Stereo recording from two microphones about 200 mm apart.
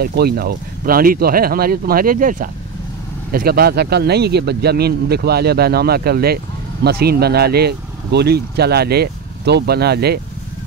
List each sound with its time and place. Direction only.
0.0 s speech: 50° right (ahead or behind)